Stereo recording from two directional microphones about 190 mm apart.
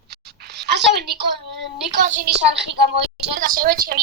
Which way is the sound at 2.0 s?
40° right (ahead or behind).